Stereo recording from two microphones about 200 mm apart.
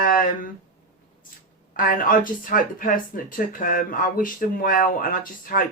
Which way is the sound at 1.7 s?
45° left (ahead or behind).